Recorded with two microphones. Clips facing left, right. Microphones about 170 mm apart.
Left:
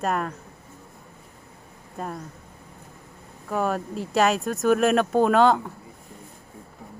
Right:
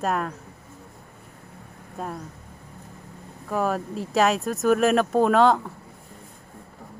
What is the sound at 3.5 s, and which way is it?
Speech, centre (ahead or behind).